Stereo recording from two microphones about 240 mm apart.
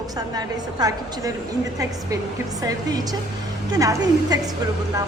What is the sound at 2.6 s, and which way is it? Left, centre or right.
A woman's voice, centre.